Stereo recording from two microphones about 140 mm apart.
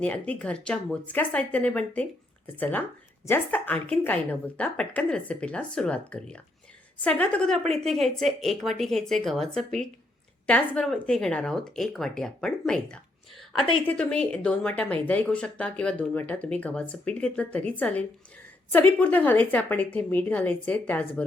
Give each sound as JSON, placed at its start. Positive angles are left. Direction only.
{"t": 0.0, "sound": "a woman's voice", "side_deg": 10}